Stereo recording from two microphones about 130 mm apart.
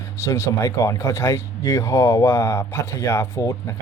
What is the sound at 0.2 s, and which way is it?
Speech, 20° left (ahead or behind).